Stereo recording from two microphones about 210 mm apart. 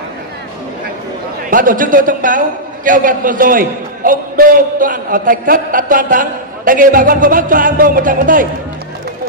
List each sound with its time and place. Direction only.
1.5 s a man's voice: 40° right (ahead or behind)